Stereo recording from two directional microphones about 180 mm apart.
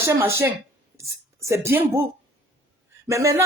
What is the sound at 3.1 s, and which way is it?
Speech, 15° right (ahead or behind).